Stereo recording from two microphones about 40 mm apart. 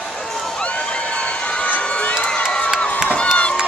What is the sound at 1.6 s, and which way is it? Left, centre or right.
Crowd, left.